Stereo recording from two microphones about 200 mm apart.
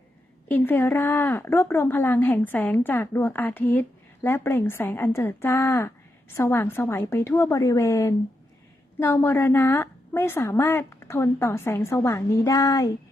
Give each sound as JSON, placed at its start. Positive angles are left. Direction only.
{"t": 0.4, "sound": "a woman's voice", "side_deg": 10}